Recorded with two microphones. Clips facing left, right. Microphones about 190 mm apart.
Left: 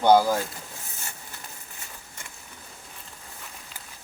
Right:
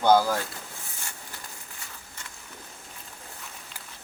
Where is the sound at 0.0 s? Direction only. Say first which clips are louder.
Left 2 dB; 15° left (ahead or behind).